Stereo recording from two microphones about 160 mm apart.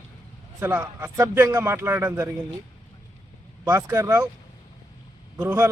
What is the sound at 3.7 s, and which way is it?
Speech, 15° right (ahead or behind).